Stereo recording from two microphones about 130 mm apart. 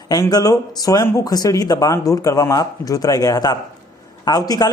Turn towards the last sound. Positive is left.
turn(degrees=30)  # may be behind; listen again after turning